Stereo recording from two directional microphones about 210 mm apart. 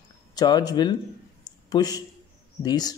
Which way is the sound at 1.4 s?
20° left (ahead or behind).